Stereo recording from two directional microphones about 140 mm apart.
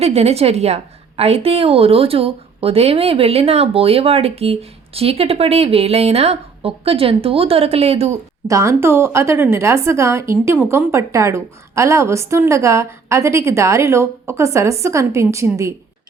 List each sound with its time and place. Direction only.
0.0 s a woman's voice: 50° right (ahead or behind)
8.4 s a woman's voice: 20° right (ahead or behind)